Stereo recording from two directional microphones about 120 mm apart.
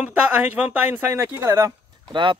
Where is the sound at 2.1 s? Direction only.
40° right (ahead or behind).